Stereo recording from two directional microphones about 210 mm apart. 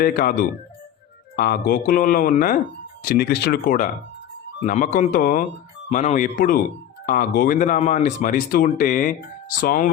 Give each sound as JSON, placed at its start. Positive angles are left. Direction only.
{"t": 0.0, "sound": "speech", "side_deg": 45}
{"t": 1.4, "sound": "speech", "side_deg": 45}